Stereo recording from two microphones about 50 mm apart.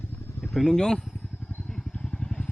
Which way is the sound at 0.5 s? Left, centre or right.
Centre.